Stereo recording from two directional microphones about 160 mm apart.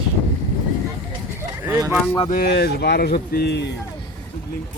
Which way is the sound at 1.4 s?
15° right (ahead or behind).